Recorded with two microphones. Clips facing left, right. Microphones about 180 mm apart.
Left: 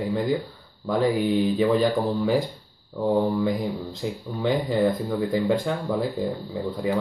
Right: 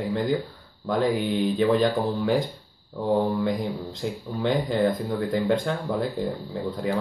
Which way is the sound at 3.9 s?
Centre (ahead or behind).